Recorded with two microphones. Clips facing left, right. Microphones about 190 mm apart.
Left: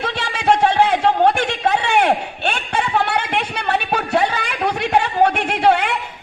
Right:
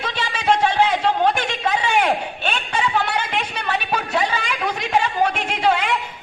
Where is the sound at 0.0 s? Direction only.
60° left (ahead or behind).